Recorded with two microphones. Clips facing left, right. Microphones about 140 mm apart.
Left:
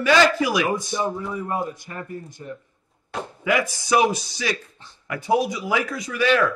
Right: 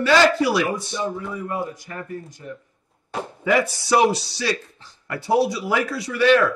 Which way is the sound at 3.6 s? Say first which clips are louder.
Even; 15° left (ahead or behind).